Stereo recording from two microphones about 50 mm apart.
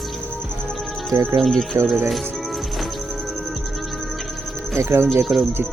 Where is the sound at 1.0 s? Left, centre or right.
Centre.